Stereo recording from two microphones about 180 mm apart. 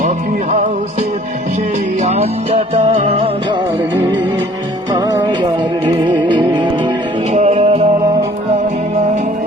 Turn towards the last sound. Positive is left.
turn(degrees=-35)  # may be behind; listen again after turning